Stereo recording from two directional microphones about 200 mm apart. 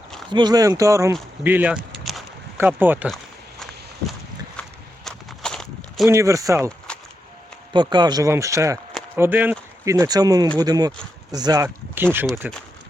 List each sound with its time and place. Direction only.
0.3 s speech: 20° right (ahead or behind)
5.0 s walk: 5° left (ahead or behind)
6.1 s speech: 15° right (ahead or behind)
6.9 s a sound: 5° left (ahead or behind)
7.7 s speech: 20° right (ahead or behind); by 12.6 s 5° right (ahead or behind)